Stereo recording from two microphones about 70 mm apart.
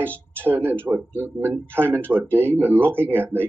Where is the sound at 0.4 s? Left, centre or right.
Right.